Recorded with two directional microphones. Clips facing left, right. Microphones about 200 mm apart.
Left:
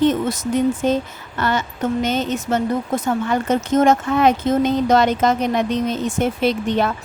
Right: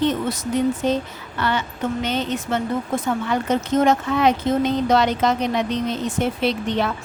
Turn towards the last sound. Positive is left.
turn(degrees=45)  # may be behind; listen again after turning